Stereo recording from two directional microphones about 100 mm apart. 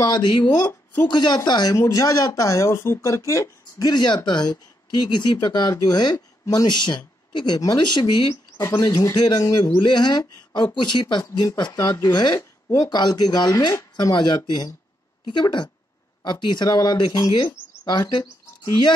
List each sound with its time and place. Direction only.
0.0 s speech: 45° left (ahead or behind)
3.9 s speech: 45° left (ahead or behind)